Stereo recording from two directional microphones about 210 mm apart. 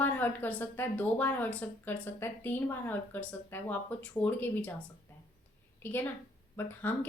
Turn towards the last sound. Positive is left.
turn(degrees=10)  # may be behind; listen again after turning